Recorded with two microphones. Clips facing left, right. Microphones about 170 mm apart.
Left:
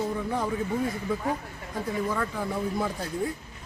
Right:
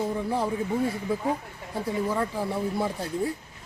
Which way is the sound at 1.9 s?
25° right (ahead or behind).